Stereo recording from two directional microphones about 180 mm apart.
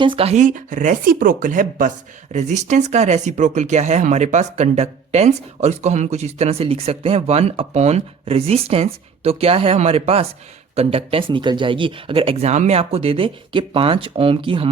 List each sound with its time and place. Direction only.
0.0 s speech: 30° right (ahead or behind)